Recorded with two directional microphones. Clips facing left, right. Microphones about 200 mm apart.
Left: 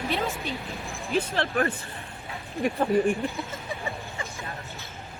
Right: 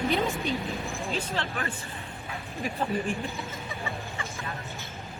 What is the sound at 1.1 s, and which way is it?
Speech, 60° left (ahead or behind).